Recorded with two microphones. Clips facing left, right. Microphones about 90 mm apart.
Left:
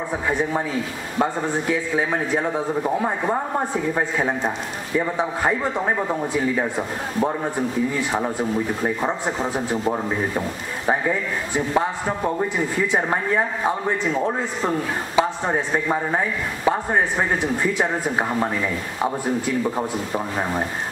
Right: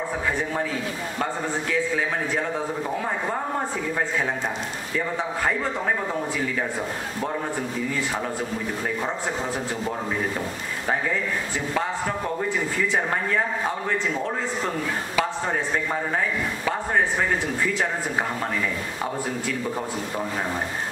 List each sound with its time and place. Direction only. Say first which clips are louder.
1.1 s a man's voice: left 7 dB; 20° left (ahead or behind)
4.9 s a man's voice: left 5 dB; 20° left (ahead or behind)
8.8 s a man's voice: left 4 dB; 30° left (ahead or behind)
12.8 s a man's voice: left 3 dB; 20° left (ahead or behind)
15.1 s a man's voice: left 5 dB; 20° left (ahead or behind)